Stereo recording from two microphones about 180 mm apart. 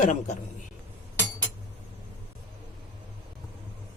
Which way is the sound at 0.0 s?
45° left (ahead or behind).